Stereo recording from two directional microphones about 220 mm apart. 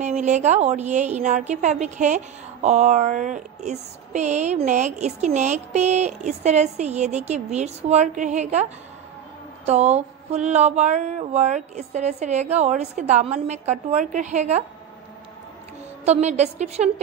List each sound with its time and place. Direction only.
0.0 s a woman's voice: 30° right (ahead or behind)
16.1 s a woman's voice: 30° right (ahead or behind)